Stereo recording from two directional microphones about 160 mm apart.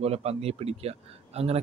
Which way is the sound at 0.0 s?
40° right (ahead or behind).